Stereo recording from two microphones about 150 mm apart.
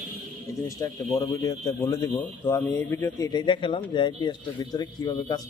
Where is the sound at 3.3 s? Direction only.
30° left (ahead or behind).